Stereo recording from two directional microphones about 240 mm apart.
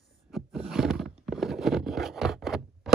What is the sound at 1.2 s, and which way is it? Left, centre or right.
Zipper, centre.